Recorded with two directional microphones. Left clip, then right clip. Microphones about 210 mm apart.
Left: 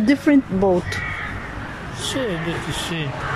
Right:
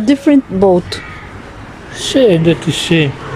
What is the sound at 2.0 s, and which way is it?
Speech, 45° right (ahead or behind).